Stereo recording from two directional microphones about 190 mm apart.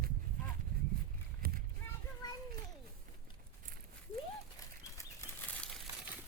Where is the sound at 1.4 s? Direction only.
50° right (ahead or behind).